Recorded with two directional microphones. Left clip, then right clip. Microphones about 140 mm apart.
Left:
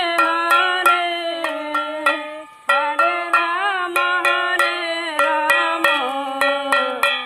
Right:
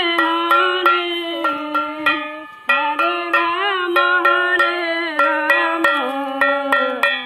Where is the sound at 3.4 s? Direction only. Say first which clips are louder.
Right 2 dB; 15° left (ahead or behind).